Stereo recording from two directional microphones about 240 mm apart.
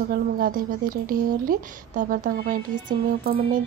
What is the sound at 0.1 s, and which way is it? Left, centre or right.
A woman's voice, right.